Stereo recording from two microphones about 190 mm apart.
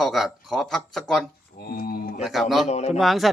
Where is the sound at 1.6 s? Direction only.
50° left (ahead or behind).